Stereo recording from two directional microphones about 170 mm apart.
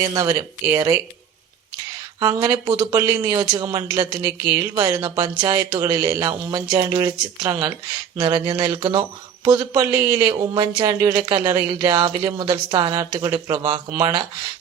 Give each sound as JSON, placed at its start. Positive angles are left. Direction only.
{"t": 0.0, "sound": "speech", "side_deg": -20}
{"t": 2.2, "sound": "speech", "side_deg": -20}